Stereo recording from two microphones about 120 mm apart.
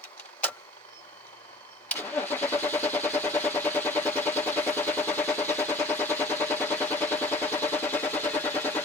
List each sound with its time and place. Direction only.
1.9 s vehicle: 15° left (ahead or behind)